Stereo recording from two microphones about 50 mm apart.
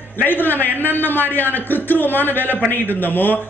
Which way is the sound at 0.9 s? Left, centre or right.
Left.